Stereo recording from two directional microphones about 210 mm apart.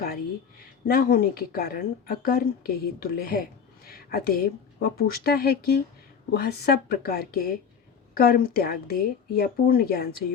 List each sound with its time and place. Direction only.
0.9 s speech: 45° left (ahead or behind)